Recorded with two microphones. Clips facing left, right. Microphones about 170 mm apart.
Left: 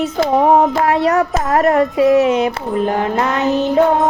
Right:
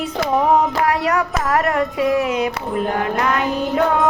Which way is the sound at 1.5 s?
25° left (ahead or behind).